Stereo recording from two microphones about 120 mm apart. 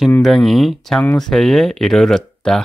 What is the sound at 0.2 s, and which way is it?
Speech, centre (ahead or behind).